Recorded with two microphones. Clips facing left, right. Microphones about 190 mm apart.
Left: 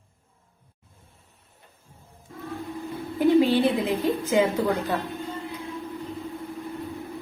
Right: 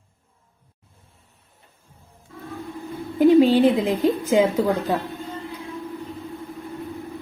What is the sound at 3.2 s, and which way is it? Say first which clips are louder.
A woman's voice: right 5 dB; 15° right (ahead or behind).